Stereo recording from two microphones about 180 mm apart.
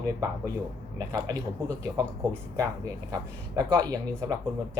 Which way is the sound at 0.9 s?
20° right (ahead or behind).